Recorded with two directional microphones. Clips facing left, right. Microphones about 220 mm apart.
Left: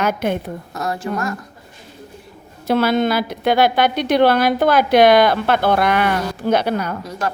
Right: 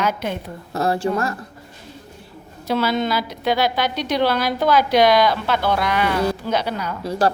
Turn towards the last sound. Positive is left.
turn(degrees=-35)  # may be behind; listen again after turning